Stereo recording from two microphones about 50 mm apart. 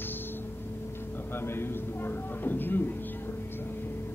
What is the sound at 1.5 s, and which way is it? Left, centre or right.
A man's voice, left.